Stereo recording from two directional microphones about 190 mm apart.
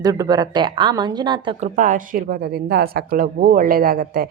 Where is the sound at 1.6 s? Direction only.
45° right (ahead or behind).